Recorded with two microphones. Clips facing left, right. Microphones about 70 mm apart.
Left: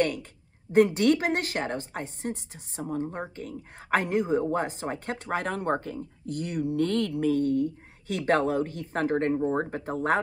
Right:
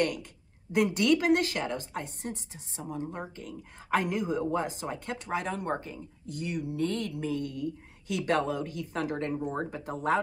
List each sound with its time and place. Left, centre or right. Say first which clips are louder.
0.0 s a woman's voice: left 3 dB; left
7.3 s a woman's voice: left 8 dB; left